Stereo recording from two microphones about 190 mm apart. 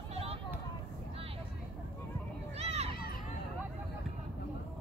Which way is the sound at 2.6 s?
35° right (ahead or behind).